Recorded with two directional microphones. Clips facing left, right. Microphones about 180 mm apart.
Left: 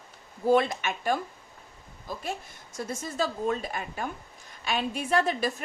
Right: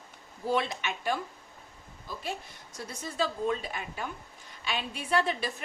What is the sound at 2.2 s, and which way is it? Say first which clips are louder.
A woman's voice: right 1 dB; 50° left (ahead or behind).